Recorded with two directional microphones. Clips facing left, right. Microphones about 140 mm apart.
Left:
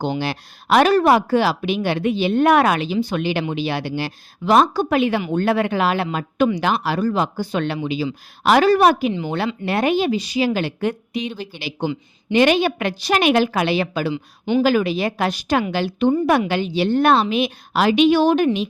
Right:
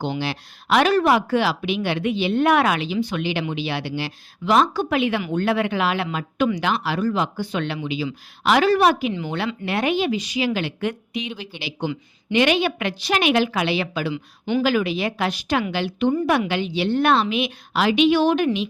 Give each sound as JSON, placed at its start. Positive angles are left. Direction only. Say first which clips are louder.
{"t": 0.0, "sound": "speech", "louder": "left 3 dB", "side_deg": 45}
{"t": 14.1, "sound": "speech", "louder": "left 3 dB", "side_deg": 25}
{"t": 14.6, "sound": "speech", "louder": "left 3 dB", "side_deg": 40}